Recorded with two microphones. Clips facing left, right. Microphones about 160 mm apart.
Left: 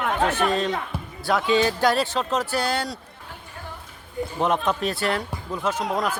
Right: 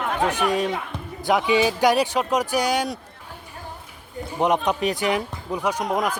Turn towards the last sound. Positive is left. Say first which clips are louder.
# right 1 dB
turn(degrees=-15)  # may be behind; listen again after turning